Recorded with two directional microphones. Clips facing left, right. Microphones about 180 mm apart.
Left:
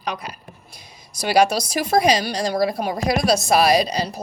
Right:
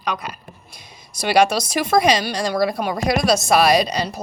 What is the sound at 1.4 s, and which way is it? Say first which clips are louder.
A woman's voice: right 1 dB; 35° left (ahead or behind).